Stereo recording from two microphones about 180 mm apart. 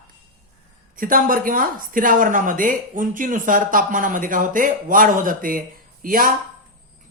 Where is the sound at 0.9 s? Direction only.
50° right (ahead or behind).